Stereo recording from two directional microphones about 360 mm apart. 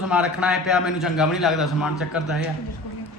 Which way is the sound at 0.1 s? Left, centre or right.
Centre.